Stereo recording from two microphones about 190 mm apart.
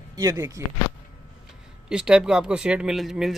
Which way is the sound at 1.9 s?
5° right (ahead or behind).